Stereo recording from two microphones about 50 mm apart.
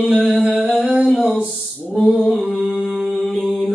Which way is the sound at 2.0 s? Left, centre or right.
Centre.